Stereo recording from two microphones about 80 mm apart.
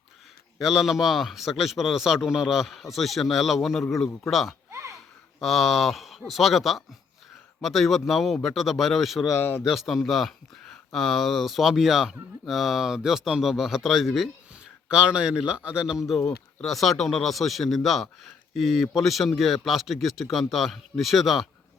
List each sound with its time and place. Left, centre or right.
0.6 s speech: centre
4.7 s a sound: right
5.4 s speech: centre
9.3 s a man's voice: left
9.6 s speech: centre